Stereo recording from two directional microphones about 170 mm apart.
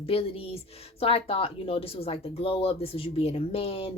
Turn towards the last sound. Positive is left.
turn(degrees=35)  # may be behind; listen again after turning